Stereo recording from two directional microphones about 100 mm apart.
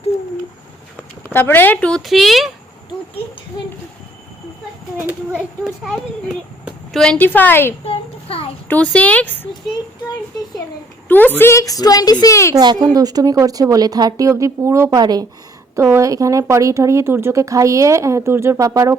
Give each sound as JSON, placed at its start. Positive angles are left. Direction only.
{"t": 1.3, "sound": "speech", "side_deg": 20}
{"t": 2.0, "sound": "speech", "side_deg": 0}
{"t": 5.3, "sound": "a child's voice", "side_deg": -10}
{"t": 6.9, "sound": "speech", "side_deg": 5}
{"t": 7.2, "sound": "speech", "side_deg": 20}
{"t": 7.9, "sound": "a sound", "side_deg": 75}
{"t": 8.6, "sound": "speech", "side_deg": 15}
{"t": 11.1, "sound": "speech", "side_deg": 20}
{"t": 12.5, "sound": "speech", "side_deg": -40}
{"t": 15.7, "sound": "speech", "side_deg": -30}